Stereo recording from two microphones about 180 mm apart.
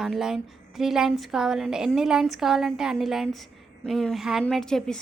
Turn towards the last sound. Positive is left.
turn(degrees=5)  # may be behind; listen again after turning